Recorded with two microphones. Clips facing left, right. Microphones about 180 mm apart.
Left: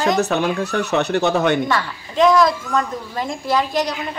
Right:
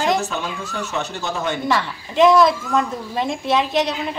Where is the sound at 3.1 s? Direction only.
25° right (ahead or behind).